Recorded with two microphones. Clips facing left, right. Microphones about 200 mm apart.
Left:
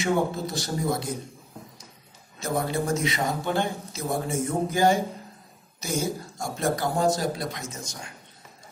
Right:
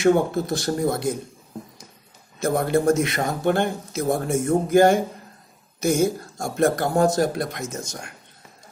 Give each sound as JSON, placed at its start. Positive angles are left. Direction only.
{"t": 0.0, "sound": "a man's voice", "side_deg": -60}
{"t": 2.4, "sound": "a man's voice", "side_deg": -55}